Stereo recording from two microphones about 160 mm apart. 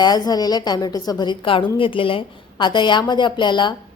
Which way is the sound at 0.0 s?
25° left (ahead or behind).